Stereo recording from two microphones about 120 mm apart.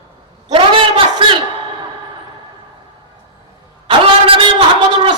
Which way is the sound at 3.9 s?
50° right (ahead or behind).